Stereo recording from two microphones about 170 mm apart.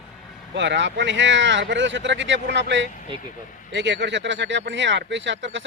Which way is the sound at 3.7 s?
90° right.